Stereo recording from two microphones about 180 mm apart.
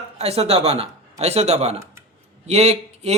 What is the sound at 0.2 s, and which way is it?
Speech, 35° right (ahead or behind).